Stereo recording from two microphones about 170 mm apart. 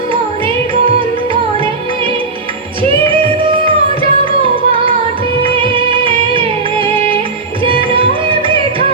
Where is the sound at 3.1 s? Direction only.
30° right (ahead or behind).